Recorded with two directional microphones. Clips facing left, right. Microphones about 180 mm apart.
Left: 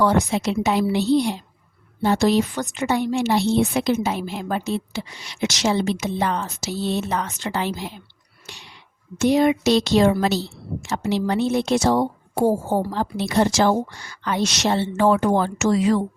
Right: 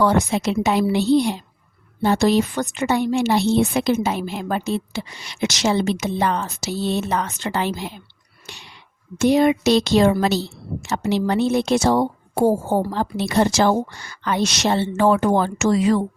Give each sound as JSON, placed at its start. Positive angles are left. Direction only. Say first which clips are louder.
{"t": 0.0, "sound": "a woman's voice", "louder": "right 1 dB", "side_deg": -60}
{"t": 9.1, "sound": "a woman's voice", "louder": "right 1 dB", "side_deg": -60}